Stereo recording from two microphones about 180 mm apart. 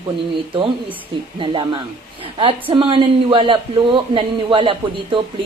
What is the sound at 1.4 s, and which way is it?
A woman's voice, 30° right (ahead or behind).